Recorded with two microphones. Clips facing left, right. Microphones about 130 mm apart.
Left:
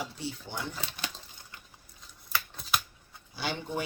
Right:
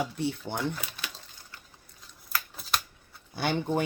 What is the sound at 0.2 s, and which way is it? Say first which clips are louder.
Speech: right 7 dB; 55° right (ahead or behind).